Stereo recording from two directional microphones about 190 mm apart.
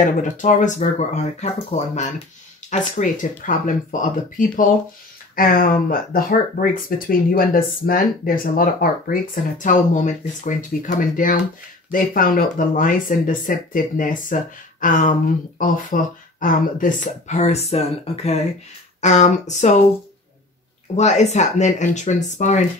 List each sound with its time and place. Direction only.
0.0 s speech: 40° left (ahead or behind)
20.9 s speech: 35° left (ahead or behind)